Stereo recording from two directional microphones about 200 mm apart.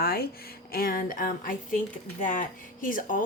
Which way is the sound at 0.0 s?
50° left (ahead or behind).